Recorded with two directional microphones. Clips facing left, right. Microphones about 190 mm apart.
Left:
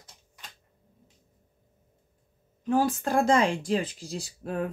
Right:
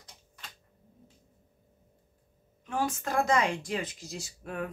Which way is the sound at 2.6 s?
35° left (ahead or behind).